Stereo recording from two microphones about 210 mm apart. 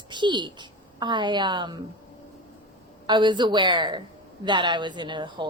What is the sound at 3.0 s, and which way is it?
A woman's voice, 20° right (ahead or behind).